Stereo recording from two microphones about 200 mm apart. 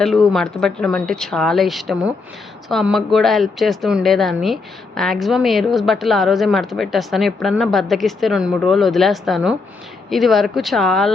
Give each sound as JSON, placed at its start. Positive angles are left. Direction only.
{"t": 0.0, "sound": "a woman's voice", "side_deg": 0}